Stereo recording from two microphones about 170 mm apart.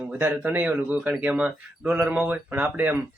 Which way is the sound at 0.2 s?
10° right (ahead or behind).